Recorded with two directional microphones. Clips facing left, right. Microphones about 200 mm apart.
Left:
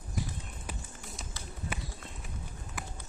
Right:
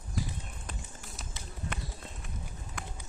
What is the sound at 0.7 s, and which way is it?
Music, centre (ahead or behind).